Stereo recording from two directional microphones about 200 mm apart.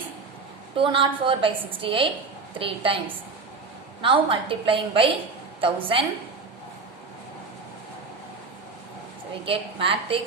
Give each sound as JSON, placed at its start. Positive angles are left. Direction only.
{"t": 0.8, "sound": "a woman's voice", "side_deg": -25}
{"t": 4.0, "sound": "a woman's voice", "side_deg": -25}
{"t": 9.4, "sound": "a woman's voice", "side_deg": -25}